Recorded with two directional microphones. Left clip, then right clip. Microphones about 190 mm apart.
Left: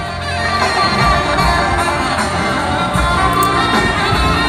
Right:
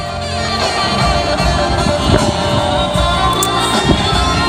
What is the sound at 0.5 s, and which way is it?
Music, 35° right (ahead or behind).